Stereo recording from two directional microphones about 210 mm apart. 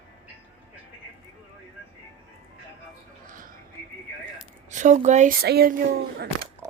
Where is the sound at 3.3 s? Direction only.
40° right (ahead or behind).